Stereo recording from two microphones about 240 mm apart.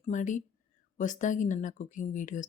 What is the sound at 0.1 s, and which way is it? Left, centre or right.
Speech, left.